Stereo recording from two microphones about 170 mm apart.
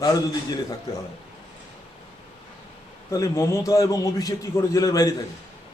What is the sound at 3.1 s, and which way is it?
A man's voice, 20° left (ahead or behind).